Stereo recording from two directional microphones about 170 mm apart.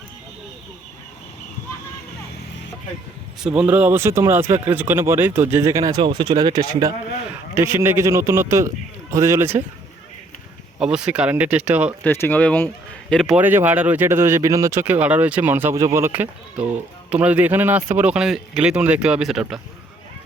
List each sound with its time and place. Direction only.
3.4 s speech: 5° right (ahead or behind)
10.9 s speech: 5° right (ahead or behind)
12.0 s speech: 10° left (ahead or behind)